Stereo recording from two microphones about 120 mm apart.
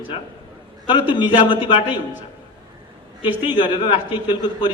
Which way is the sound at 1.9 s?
15° right (ahead or behind).